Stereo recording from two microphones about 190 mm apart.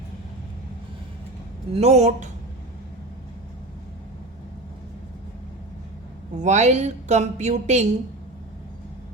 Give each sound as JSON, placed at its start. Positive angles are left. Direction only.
{"t": 1.7, "sound": "a woman's voice", "side_deg": -35}
{"t": 6.4, "sound": "a woman's voice", "side_deg": -40}